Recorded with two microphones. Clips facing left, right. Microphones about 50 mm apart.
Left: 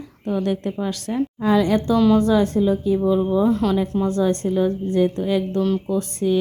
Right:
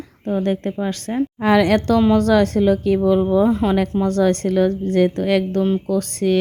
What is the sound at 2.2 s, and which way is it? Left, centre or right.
Speech, right.